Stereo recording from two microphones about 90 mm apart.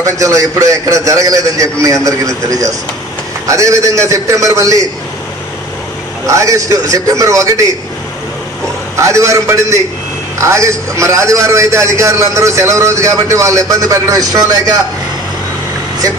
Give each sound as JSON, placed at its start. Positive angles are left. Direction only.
{"t": 0.0, "sound": "a man's voice", "side_deg": -35}
{"t": 6.2, "sound": "a man's voice", "side_deg": -35}
{"t": 8.9, "sound": "a man's voice", "side_deg": -35}